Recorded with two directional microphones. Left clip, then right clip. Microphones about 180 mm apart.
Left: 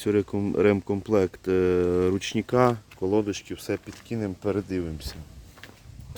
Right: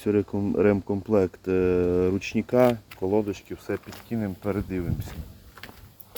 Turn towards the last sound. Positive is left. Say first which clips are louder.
# left 2 dB
turn(degrees=35)  # may be behind; listen again after turning